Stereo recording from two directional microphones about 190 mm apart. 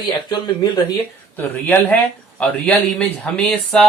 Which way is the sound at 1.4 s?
10° left (ahead or behind).